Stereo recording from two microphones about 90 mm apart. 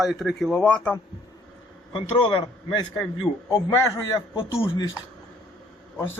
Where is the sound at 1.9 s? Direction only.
70° left (ahead or behind).